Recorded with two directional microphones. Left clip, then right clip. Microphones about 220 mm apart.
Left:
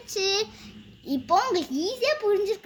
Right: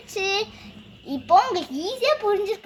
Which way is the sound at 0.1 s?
30° left (ahead or behind).